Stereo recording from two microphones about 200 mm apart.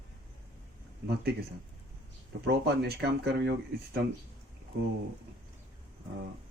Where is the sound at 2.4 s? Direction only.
55° right (ahead or behind).